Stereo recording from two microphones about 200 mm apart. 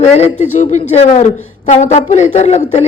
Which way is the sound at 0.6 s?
35° left (ahead or behind).